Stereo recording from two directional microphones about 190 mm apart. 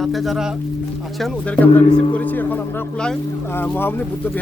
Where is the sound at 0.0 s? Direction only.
Centre (ahead or behind).